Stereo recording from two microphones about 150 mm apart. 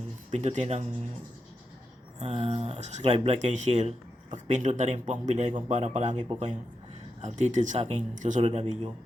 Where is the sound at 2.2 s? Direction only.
45° right (ahead or behind).